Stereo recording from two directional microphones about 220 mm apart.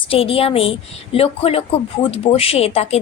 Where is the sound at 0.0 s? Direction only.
25° left (ahead or behind).